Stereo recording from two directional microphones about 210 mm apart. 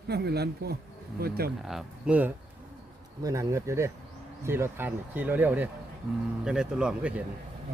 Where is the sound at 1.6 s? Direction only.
5° right (ahead or behind).